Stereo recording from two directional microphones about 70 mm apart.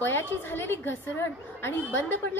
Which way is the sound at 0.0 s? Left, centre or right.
Left.